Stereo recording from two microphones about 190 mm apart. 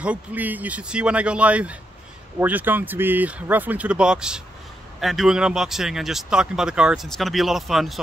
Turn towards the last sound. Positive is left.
turn(degrees=0)  # may be behind; listen again after turning